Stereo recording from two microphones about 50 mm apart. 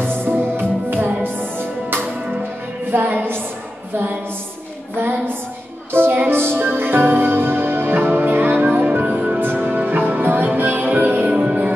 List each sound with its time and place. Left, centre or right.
0.2 s music: right
3.9 s a sound: right
4.9 s a sound: right
5.9 s music: right
9.0 s music: right
9.4 s music: right
11.3 s music: right